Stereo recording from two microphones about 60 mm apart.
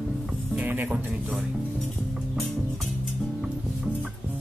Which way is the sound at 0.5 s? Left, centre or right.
Right.